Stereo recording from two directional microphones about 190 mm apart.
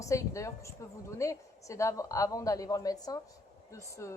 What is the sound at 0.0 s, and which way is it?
Speech, 15° left (ahead or behind).